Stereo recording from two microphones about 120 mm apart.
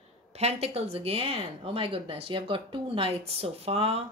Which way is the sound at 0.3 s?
60° right (ahead or behind).